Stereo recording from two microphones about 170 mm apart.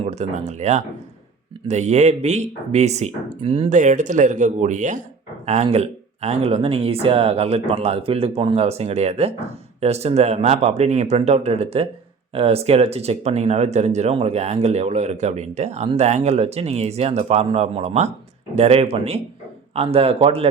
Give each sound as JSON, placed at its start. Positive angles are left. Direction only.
{"t": 0.0, "sound": "speech", "side_deg": -40}